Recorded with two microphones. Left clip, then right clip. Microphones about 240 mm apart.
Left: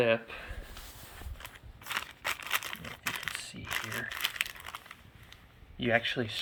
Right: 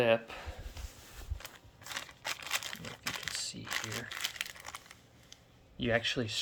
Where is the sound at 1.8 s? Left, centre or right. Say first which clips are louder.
Left 5 dB; centre.